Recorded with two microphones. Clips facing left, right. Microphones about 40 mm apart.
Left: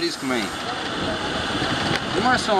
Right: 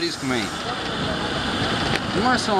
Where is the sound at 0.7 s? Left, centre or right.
Centre.